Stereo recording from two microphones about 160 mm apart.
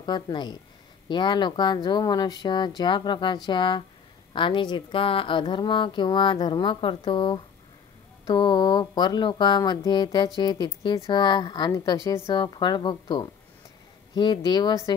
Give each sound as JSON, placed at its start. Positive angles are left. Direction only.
{"t": 0.0, "sound": "speech", "side_deg": 25}